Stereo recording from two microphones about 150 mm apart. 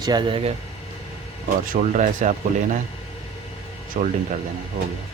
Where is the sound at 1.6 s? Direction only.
55° right (ahead or behind).